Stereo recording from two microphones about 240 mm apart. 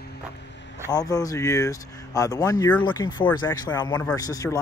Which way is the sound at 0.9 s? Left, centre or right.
Centre.